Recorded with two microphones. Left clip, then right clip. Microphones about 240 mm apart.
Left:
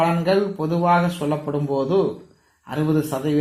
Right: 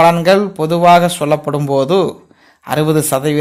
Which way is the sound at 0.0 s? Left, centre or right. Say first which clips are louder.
Right 10 dB; right.